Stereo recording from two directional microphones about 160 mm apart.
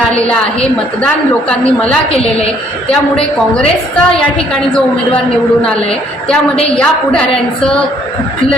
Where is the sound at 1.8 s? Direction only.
40° left (ahead or behind).